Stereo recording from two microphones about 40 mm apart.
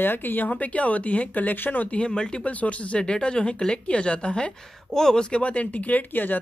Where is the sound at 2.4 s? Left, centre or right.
Left.